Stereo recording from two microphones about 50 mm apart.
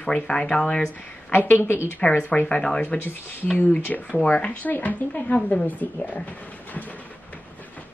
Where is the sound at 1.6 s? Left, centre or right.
Left.